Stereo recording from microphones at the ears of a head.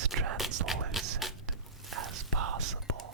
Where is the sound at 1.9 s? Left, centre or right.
Right.